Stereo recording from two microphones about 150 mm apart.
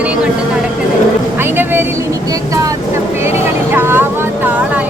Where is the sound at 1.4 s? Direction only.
15° right (ahead or behind).